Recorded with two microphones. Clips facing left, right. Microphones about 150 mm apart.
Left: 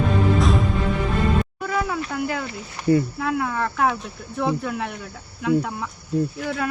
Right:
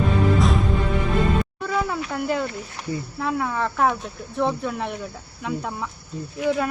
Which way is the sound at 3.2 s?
Centre (ahead or behind).